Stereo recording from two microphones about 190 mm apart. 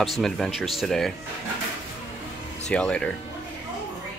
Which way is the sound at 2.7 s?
5° left (ahead or behind).